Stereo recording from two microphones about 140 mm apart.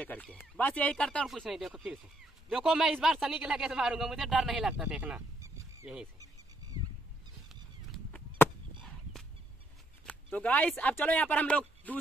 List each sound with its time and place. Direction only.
0.0 s a man's voice: 10° left (ahead or behind); by 5.2 s 10° right (ahead or behind)
7.4 s a sound: 5° left (ahead or behind)
8.4 s chop: 15° left (ahead or behind)
10.0 s speech: 10° left (ahead or behind)